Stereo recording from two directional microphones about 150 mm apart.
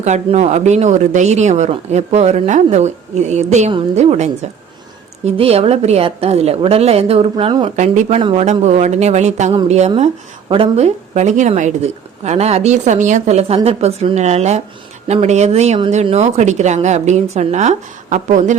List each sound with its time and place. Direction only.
0.0 s a woman's voice: 50° right (ahead or behind)
7.8 s a woman's voice: 55° right (ahead or behind)
8.2 s a man's voice: 35° right (ahead or behind)
8.4 s a woman's voice: 50° right (ahead or behind)